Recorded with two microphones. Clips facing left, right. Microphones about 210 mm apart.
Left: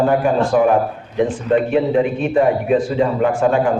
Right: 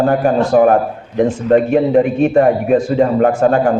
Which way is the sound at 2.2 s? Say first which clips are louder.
Right 4 dB; 45° right (ahead or behind).